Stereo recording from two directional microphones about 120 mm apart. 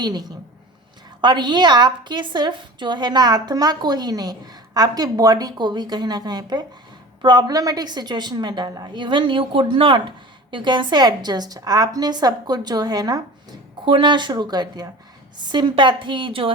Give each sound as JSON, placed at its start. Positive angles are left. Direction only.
{"t": 0.0, "sound": "a woman's voice", "side_deg": -35}
{"t": 13.8, "sound": "a woman's voice", "side_deg": -45}